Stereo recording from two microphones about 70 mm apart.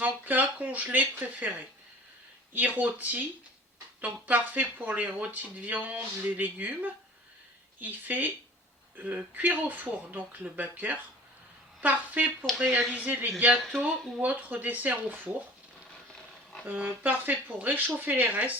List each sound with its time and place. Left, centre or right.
0.0 s speech: right
13.7 s speech: centre
14.2 s speech: right
16.6 s speech: right